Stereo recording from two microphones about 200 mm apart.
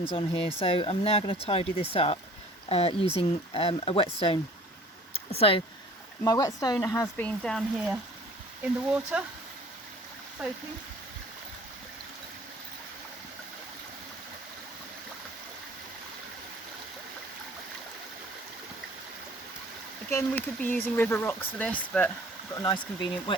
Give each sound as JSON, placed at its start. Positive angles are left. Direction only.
{"t": 0.0, "sound": "speech", "side_deg": 25}
{"t": 6.2, "sound": "speech", "side_deg": 20}
{"t": 10.4, "sound": "speech", "side_deg": -5}
{"t": 20.1, "sound": "speech", "side_deg": 10}
{"t": 22.5, "sound": "speech", "side_deg": 20}